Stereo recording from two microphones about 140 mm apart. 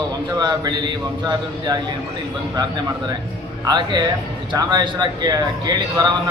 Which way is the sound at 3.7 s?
30° right (ahead or behind).